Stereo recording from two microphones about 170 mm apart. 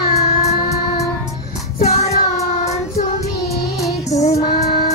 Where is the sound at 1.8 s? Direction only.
40° left (ahead or behind).